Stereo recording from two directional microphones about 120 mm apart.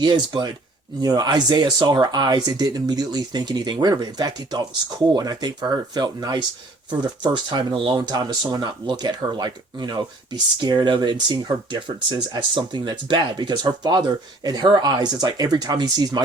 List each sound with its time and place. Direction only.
0.0 s speech: 35° right (ahead or behind)
7.9 s speech: 35° right (ahead or behind)